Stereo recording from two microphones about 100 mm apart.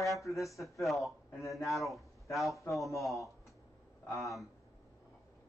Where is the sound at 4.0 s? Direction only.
25° left (ahead or behind).